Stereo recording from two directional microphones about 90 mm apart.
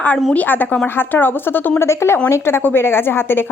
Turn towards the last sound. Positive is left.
turn(degrees=25)  # may be behind; listen again after turning